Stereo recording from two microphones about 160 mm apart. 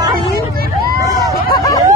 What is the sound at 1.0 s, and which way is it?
Hubbub, 20° right (ahead or behind).